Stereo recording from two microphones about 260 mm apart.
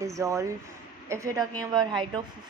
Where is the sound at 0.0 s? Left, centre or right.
Centre.